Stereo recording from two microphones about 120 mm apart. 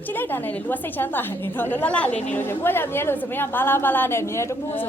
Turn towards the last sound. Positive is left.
turn(degrees=20)  # may be behind; listen again after turning